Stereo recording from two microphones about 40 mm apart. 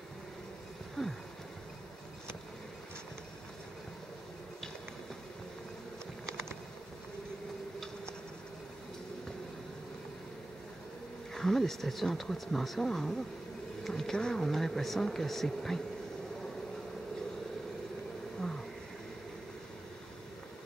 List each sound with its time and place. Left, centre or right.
1.0 s a sound: centre
11.3 s speech: centre
13.8 s pigeon: centre
14.1 s speech: centre